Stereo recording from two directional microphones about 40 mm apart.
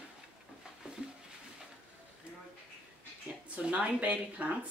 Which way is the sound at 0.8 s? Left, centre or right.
Right.